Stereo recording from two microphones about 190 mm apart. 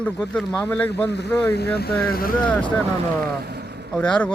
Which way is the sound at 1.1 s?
60° left (ahead or behind).